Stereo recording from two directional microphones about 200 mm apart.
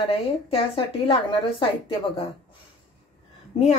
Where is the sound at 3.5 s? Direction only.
30° left (ahead or behind).